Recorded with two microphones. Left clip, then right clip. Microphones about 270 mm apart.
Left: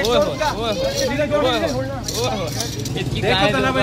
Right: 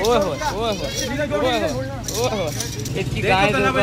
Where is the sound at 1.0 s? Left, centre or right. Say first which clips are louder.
Left 4 dB; centre.